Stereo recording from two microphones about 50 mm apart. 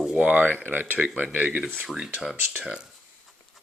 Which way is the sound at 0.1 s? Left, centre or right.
Right.